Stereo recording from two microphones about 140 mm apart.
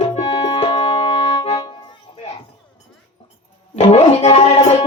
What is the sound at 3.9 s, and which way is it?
Speech, 50° left (ahead or behind).